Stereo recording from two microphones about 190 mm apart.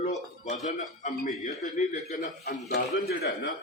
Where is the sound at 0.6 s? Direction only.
40° left (ahead or behind).